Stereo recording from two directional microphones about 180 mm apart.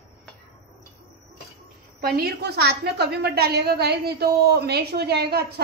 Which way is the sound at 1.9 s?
60° right (ahead or behind).